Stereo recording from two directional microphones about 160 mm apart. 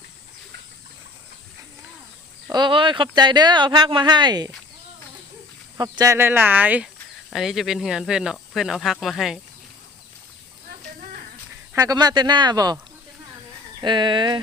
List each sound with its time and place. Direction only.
2.5 s speech: 30° right (ahead or behind)
5.7 s speech: 20° right (ahead or behind); by 9.4 s centre (ahead or behind)
11.7 s speech: 20° right (ahead or behind)
13.8 s speech: 30° right (ahead or behind)